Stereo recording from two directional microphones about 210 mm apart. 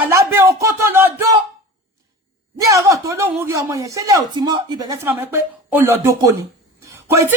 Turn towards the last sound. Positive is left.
turn(degrees=-10)  # may be behind; listen again after turning